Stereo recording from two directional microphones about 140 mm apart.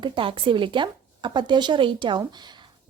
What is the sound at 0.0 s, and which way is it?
Speech, 40° right (ahead or behind).